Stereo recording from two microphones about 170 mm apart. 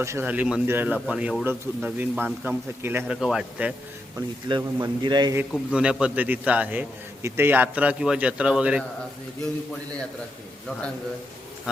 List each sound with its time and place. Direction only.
0.0 s a man's voice: 15° right (ahead or behind)
4.4 s a man's voice: 25° right (ahead or behind)
5.4 s a man's voice: 5° right (ahead or behind)